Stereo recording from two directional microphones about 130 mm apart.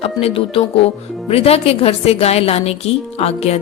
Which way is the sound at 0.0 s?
50° left (ahead or behind).